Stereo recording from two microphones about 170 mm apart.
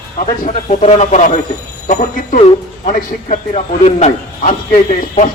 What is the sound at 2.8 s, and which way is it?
Speech, 45° left (ahead or behind).